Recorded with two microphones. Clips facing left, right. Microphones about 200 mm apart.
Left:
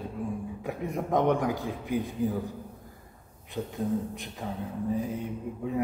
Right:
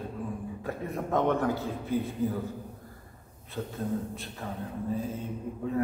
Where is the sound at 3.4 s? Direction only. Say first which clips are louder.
Left 2 dB; 15° left (ahead or behind).